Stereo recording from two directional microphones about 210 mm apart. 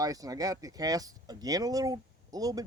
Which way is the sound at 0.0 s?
15° right (ahead or behind).